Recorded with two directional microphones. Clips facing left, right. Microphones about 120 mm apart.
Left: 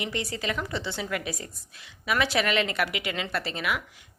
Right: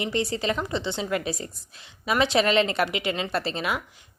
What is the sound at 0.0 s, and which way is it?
A woman's voice, 30° right (ahead or behind).